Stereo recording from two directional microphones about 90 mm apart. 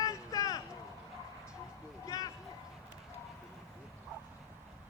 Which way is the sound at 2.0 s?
40° left (ahead or behind).